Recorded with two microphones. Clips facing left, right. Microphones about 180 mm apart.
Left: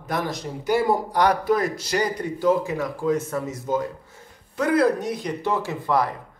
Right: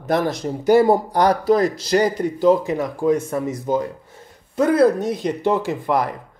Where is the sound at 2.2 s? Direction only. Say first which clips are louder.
Right 5 dB; 20° right (ahead or behind).